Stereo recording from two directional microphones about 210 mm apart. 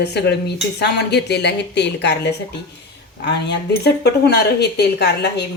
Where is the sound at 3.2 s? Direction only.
55° left (ahead or behind).